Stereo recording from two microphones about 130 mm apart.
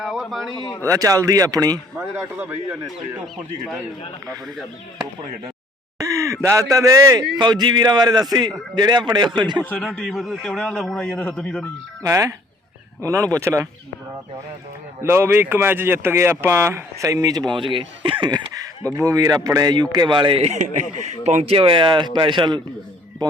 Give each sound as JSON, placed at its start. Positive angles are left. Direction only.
{"t": 0.0, "sound": "speech", "side_deg": 0}
{"t": 0.9, "sound": "speech", "side_deg": -25}
{"t": 2.0, "sound": "a man's voice", "side_deg": -15}
{"t": 6.0, "sound": "speech", "side_deg": -25}
{"t": 9.6, "sound": "a man's voice", "side_deg": 10}
{"t": 12.0, "sound": "speech", "side_deg": -25}
{"t": 15.0, "sound": "speech", "side_deg": -20}
{"t": 20.4, "sound": "speech", "side_deg": -60}